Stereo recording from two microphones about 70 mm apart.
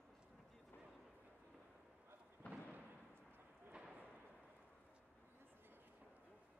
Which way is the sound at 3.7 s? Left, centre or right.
Centre.